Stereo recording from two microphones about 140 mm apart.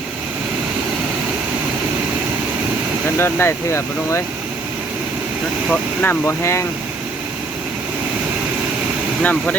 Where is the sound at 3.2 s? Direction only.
15° left (ahead or behind).